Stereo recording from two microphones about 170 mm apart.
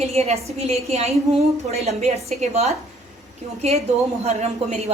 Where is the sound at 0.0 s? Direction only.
40° right (ahead or behind).